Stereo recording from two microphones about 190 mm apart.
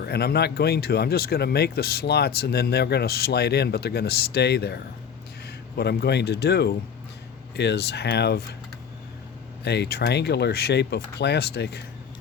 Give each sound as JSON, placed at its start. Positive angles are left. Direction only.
{"t": 0.0, "sound": "speech", "side_deg": 55}
{"t": 9.6, "sound": "speech", "side_deg": 60}